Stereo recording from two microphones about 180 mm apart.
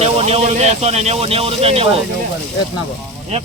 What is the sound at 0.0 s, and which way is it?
Speech, 35° right (ahead or behind).